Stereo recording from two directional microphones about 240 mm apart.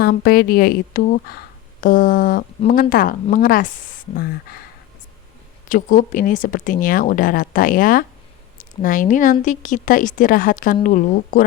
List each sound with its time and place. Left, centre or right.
0.0 s speech: left